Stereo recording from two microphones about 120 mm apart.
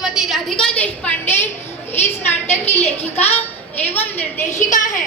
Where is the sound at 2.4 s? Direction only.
65° left (ahead or behind).